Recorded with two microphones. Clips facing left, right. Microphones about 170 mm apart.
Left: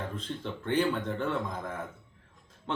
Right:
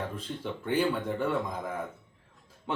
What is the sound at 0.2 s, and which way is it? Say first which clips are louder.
Speech: right 1 dB; 10° right (ahead or behind).